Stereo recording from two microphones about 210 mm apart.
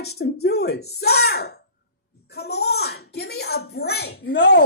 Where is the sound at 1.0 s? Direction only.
50° left (ahead or behind).